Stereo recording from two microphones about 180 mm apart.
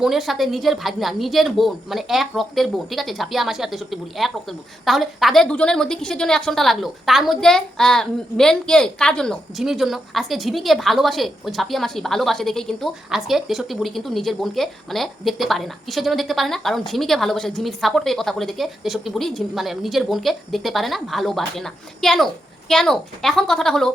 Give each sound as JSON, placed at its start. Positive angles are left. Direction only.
{"t": 0.0, "sound": "a woman's voice", "side_deg": 0}